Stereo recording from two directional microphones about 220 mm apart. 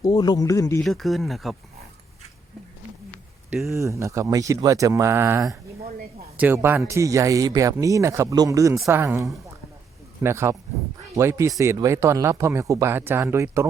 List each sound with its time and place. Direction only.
0.0 s speech: 20° left (ahead or behind)
0.8 s speech: centre (ahead or behind)
3.7 s speech: 15° right (ahead or behind)